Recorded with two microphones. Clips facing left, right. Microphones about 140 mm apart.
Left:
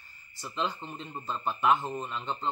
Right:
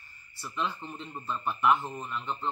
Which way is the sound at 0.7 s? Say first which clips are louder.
Even; 15° left (ahead or behind).